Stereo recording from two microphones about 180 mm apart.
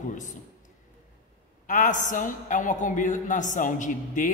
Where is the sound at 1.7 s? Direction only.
45° left (ahead or behind).